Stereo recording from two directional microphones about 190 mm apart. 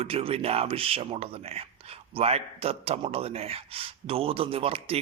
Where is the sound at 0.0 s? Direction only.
30° right (ahead or behind).